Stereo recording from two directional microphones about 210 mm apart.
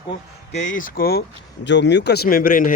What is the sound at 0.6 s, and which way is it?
Speech, 40° left (ahead or behind).